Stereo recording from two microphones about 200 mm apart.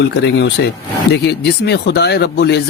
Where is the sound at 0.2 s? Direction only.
55° left (ahead or behind).